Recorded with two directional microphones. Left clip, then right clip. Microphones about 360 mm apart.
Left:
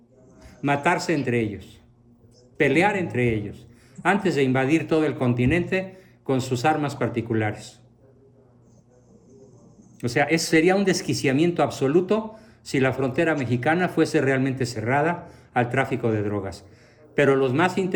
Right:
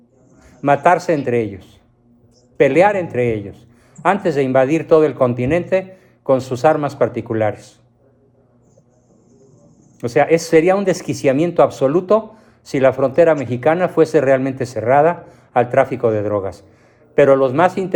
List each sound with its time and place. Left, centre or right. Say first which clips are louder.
0.4 s a man's voice: right 9 dB; centre
10.0 s a man's voice: right 8 dB; centre
12.4 s a sound: right 8 dB; centre
13.1 s a man's voice: right 10 dB; centre